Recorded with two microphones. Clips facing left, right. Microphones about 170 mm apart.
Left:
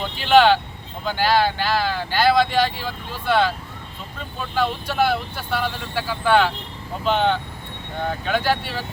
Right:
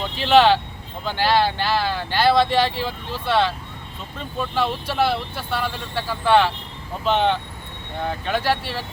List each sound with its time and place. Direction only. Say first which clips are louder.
0.2 s speech: even; centre (ahead or behind)